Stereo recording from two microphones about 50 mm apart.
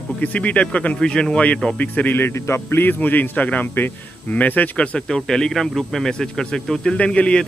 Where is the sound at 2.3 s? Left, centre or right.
Left.